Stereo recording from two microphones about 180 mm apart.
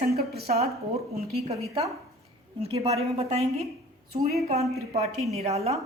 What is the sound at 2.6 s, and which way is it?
Speech, 35° right (ahead or behind).